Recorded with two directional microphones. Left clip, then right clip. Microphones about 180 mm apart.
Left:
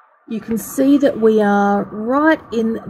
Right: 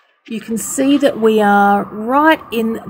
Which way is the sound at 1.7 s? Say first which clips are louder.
Right 3 dB; 20° right (ahead or behind).